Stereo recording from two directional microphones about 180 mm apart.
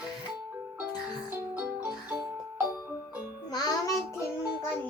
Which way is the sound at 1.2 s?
10° right (ahead or behind).